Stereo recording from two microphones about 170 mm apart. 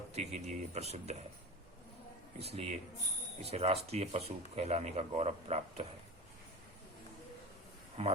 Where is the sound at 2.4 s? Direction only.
35° right (ahead or behind).